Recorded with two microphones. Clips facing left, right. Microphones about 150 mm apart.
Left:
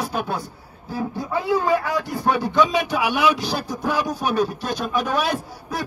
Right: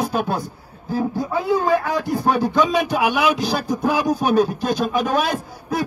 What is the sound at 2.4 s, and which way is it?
Speech, 45° right (ahead or behind).